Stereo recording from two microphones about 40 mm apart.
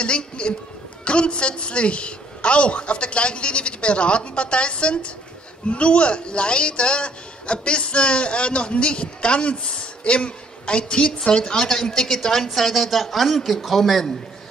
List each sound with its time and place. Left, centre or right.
0.0 s a man's voice: left; by 14.1 s centre